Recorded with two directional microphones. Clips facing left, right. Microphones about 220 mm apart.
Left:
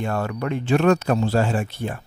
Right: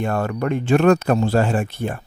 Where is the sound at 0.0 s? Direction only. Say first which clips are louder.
Right 3 dB; 50° right (ahead or behind).